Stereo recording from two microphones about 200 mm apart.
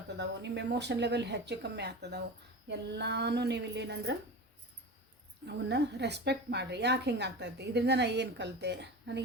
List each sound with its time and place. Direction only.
0.2 s a woman's voice: 60° right (ahead or behind)
5.5 s a woman's voice: 60° right (ahead or behind)